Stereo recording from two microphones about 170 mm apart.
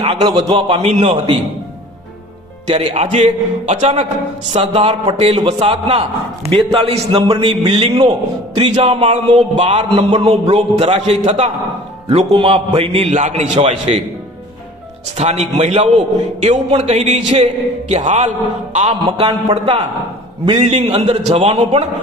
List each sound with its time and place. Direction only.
0.0 s a man's voice: 35° right (ahead or behind)
2.6 s a man's voice: 40° right (ahead or behind)
15.2 s a man's voice: 40° right (ahead or behind)
19.3 s speech: 30° right (ahead or behind)
20.7 s a man's voice: 40° right (ahead or behind)